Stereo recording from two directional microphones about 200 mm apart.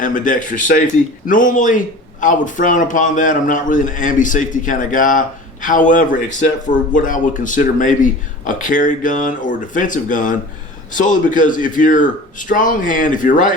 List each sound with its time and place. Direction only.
0.0 s speech: 40° left (ahead or behind)